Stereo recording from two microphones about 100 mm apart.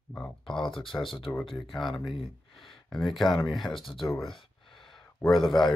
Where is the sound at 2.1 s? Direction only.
65° left (ahead or behind).